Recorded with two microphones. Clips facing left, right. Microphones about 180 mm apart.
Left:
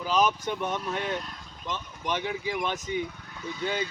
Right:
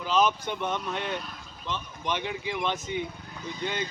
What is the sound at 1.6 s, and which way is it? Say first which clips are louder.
Speech: even; 15° left (ahead or behind).